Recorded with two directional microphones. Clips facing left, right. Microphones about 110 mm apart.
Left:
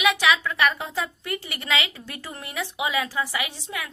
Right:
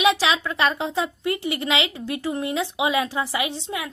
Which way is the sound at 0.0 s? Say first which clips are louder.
Right 2 dB; 30° right (ahead or behind).